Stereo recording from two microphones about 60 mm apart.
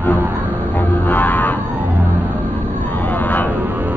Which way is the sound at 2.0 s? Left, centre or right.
Right.